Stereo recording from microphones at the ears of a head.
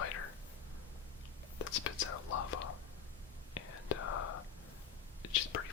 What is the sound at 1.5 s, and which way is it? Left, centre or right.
Whispering, left.